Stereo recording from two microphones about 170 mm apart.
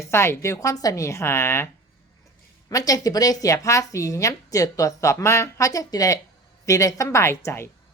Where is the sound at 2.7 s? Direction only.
20° left (ahead or behind).